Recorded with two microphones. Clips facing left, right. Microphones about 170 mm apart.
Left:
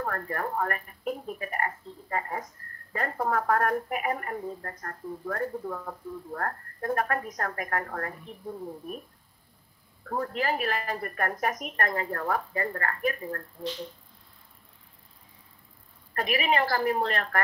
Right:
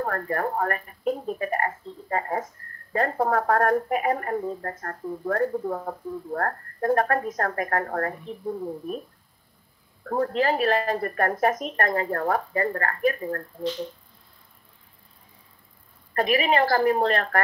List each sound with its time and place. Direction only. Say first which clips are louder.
0.0 s a woman's voice: right 5 dB; 40° right (ahead or behind)
4.4 s a woman's voice: right 6 dB; 50° right (ahead or behind); by 7.8 s 30° right (ahead or behind)
7.8 s speech: right 7 dB; 45° right (ahead or behind)
10.0 s speech: right 6 dB; 45° right (ahead or behind)
10.3 s a woman's voice: right 7 dB; 30° right (ahead or behind)
16.2 s a woman's voice: right 5 dB; 30° right (ahead or behind)